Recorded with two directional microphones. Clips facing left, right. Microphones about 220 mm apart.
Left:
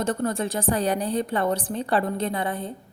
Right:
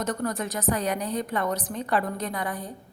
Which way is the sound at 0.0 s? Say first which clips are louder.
Left 3 dB; 25° left (ahead or behind).